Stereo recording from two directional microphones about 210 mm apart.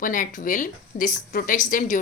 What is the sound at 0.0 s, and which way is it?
A woman's voice, 40° left (ahead or behind).